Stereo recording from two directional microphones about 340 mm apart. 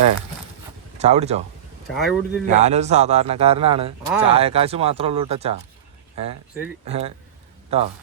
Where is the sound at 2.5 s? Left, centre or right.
Centre.